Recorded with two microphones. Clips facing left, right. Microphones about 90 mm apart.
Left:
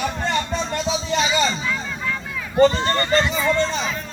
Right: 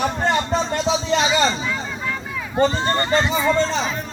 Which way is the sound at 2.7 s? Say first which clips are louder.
Even; 20° right (ahead or behind).